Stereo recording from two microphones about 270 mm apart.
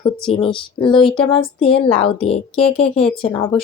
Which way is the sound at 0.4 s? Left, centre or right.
Centre.